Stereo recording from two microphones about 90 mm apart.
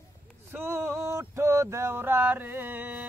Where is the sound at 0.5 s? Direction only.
25° right (ahead or behind).